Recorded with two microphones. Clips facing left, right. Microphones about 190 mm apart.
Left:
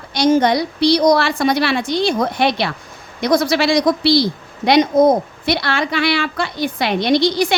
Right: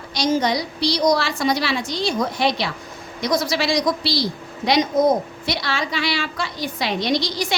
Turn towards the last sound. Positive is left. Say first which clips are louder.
# left 7 dB
turn(degrees=60)  # may be behind; listen again after turning